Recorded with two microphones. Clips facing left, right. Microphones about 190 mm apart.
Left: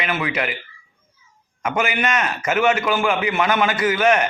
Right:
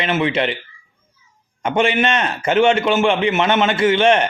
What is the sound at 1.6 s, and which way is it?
A man's voice, 30° right (ahead or behind).